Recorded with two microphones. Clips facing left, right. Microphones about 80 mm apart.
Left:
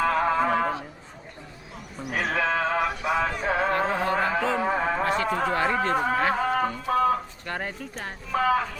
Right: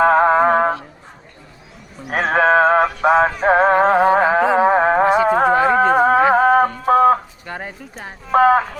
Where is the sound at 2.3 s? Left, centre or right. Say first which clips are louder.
Right 13 dB; right.